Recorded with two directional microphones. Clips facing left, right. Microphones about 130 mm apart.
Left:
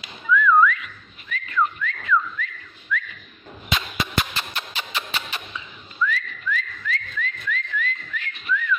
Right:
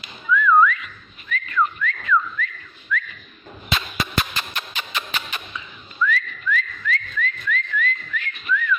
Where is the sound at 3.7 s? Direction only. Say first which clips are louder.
Right 1 dB; 20° left (ahead or behind).